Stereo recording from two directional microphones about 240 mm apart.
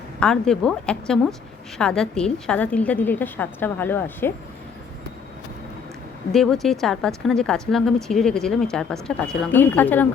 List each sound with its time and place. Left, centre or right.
0.2 s a woman's voice: centre
6.3 s speech: centre